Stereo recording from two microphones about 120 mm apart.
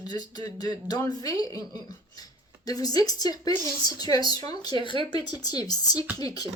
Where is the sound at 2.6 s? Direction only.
30° left (ahead or behind).